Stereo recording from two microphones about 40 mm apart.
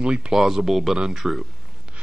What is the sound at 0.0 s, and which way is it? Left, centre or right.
Speech, right.